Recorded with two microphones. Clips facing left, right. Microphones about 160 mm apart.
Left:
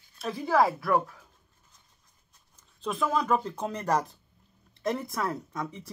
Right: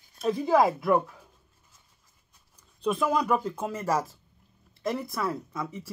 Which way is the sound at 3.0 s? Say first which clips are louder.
Even; 15° right (ahead or behind).